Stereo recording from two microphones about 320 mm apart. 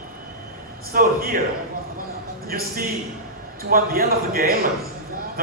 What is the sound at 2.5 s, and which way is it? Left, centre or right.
A man's voice, right.